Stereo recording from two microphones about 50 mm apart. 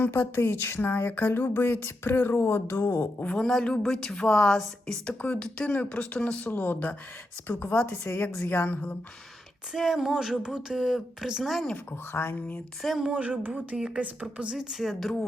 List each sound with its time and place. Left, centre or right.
0.1 s speech: left
3.3 s speech: centre
5.2 s speech: left
6.1 s speech: centre
6.4 s a woman's voice: left
9.7 s a sound: centre
10.8 s speech: centre
12.1 s speech: left
12.8 s speech: centre
13.1 s speech: right
13.5 s a sound: centre
14.0 s speech: right
14.5 s speech: centre